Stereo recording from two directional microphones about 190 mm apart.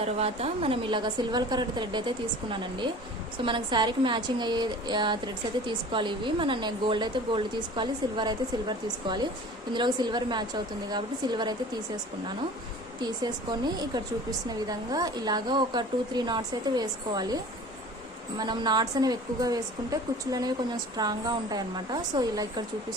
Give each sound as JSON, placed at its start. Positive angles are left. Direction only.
{"t": 0.0, "sound": "a woman's voice", "side_deg": -35}
{"t": 13.0, "sound": "a woman's voice", "side_deg": -20}
{"t": 18.3, "sound": "a woman's voice", "side_deg": -20}